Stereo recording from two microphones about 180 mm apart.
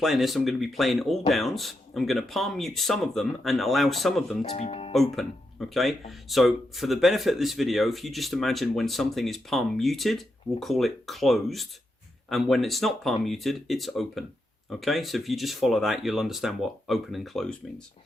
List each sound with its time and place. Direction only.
0.0 s speech: centre (ahead or behind)
4.4 s speech: 35° left (ahead or behind)
4.9 s speech: centre (ahead or behind)